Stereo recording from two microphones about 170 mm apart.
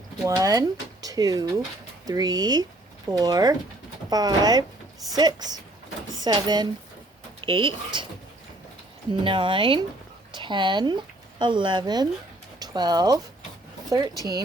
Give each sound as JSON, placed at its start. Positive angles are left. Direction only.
{"t": 0.3, "sound": "speech", "side_deg": -20}
{"t": 9.2, "sound": "speech", "side_deg": -30}
{"t": 14.2, "sound": "speech", "side_deg": -20}